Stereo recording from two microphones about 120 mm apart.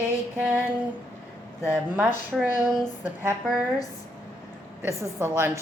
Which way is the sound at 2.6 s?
20° right (ahead or behind).